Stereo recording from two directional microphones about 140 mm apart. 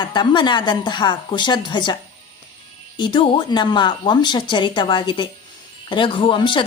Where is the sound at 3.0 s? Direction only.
35° left (ahead or behind).